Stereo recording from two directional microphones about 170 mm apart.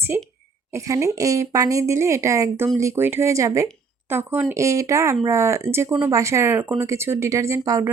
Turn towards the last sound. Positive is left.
turn(degrees=-20)  # may be behind; listen again after turning